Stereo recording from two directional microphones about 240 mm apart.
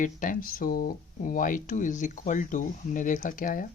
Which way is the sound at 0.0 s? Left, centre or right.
Left.